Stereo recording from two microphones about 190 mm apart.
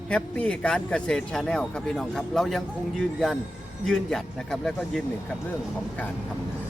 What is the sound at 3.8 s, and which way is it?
A man's voice, centre (ahead or behind).